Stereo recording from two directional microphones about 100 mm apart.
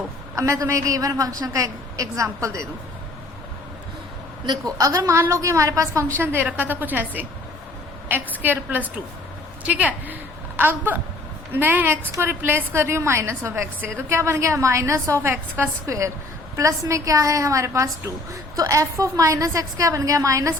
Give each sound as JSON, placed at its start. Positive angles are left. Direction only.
{"t": 0.3, "sound": "a woman's voice", "side_deg": -30}
{"t": 4.4, "sound": "a woman's voice", "side_deg": -35}
{"t": 6.1, "sound": "a woman's voice", "side_deg": -20}
{"t": 8.4, "sound": "a woman's voice", "side_deg": -20}